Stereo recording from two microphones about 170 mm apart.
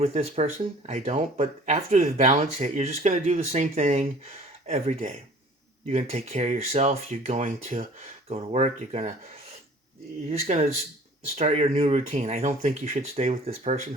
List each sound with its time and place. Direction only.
0.0 s speech: 40° right (ahead or behind)
10.4 s speech: 40° right (ahead or behind)